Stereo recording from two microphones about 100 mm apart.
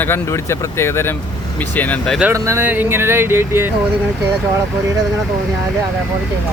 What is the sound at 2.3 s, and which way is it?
Speech, 30° right (ahead or behind).